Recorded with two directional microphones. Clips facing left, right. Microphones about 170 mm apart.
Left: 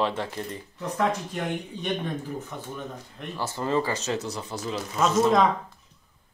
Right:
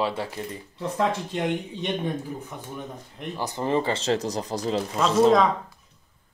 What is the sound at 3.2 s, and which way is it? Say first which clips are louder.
Speech: right 2 dB; 15° right (ahead or behind).